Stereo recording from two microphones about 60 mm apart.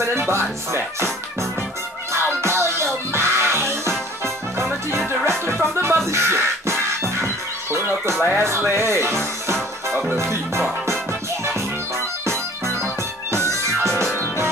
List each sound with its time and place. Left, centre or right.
0.0 s music: right
2.4 s music: right
5.8 s music: right
12.3 s music: right